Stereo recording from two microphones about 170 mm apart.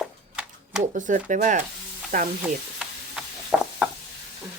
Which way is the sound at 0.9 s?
50° right (ahead or behind).